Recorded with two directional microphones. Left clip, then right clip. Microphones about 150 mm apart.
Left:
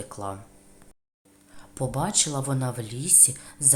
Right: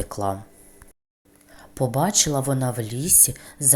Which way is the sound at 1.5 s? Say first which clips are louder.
Right 6 dB; 25° right (ahead or behind).